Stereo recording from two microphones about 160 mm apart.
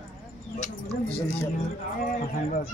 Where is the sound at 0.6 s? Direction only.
5° left (ahead or behind).